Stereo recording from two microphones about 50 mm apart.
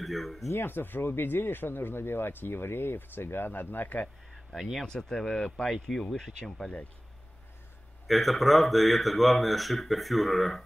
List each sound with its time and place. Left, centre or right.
0.0 s speech: centre
0.6 s speech: left
4.3 s a sound: centre
4.8 s speech: centre
8.1 s speech: centre